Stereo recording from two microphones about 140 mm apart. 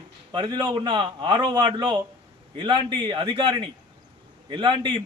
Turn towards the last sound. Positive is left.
turn(degrees=-35)  # may be behind; listen again after turning